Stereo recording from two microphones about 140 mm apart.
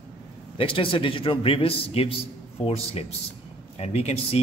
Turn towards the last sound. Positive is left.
turn(degrees=45)  # may be behind; listen again after turning